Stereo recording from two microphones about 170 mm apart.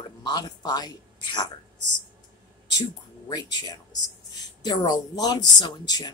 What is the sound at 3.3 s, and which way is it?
Speech, 25° left (ahead or behind).